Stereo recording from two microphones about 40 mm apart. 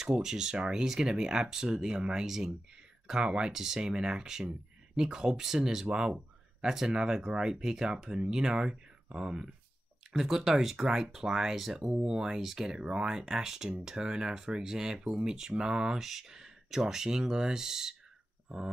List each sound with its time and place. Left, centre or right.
0.2 s speech: centre
2.2 s speech: centre
3.1 s speech: centre
3.5 s speech: centre
10.1 s speech: centre
18.5 s a sound: centre